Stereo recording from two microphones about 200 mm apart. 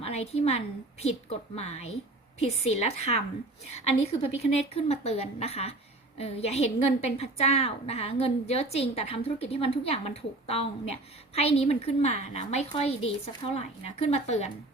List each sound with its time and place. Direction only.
0.0 s a woman's voice: 30° left (ahead or behind)